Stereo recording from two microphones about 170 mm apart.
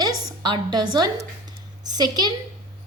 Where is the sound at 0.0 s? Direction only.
25° right (ahead or behind).